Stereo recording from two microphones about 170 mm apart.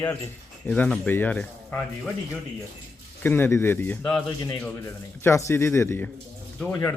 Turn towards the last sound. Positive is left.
turn(degrees=20)  # may be behind; listen again after turning